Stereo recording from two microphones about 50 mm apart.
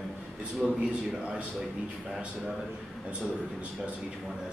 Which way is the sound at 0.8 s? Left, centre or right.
Right.